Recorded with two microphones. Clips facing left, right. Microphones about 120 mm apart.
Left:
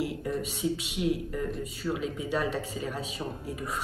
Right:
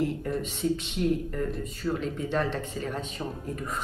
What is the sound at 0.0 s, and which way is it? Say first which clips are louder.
A woman's voice: right 2 dB; 10° left (ahead or behind).